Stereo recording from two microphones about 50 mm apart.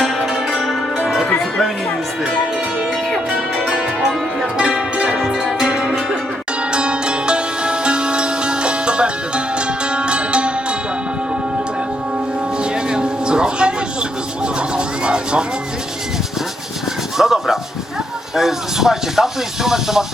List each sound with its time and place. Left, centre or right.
0.5 s music: centre
5.1 s music: centre
12.7 s music: centre
14.4 s a sound: centre
17.2 s a sound: centre
18.3 s speech: centre